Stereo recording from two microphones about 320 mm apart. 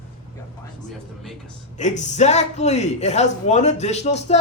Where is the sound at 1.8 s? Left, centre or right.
Left.